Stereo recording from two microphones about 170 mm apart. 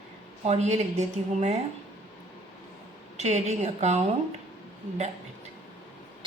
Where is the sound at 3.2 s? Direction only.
40° right (ahead or behind).